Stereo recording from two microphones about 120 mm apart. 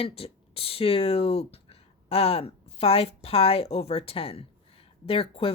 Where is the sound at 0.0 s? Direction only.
55° left (ahead or behind).